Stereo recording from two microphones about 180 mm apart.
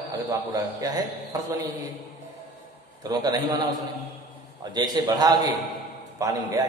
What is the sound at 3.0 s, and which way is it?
Speech, 20° right (ahead or behind).